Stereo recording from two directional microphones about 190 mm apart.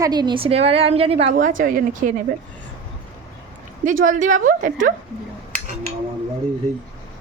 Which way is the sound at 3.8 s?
45° right (ahead or behind).